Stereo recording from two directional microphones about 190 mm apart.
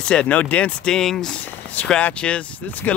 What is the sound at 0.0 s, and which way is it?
Speech, 5° left (ahead or behind).